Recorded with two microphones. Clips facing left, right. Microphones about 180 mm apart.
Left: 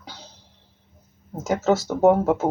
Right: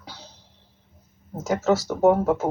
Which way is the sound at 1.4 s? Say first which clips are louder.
Left 1 dB; 25° left (ahead or behind).